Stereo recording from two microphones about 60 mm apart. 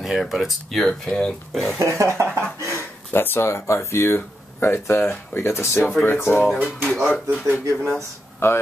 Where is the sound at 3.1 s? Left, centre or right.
Left.